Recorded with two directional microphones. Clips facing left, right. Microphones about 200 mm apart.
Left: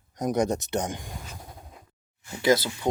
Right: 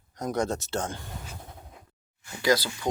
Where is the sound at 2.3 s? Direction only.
25° left (ahead or behind).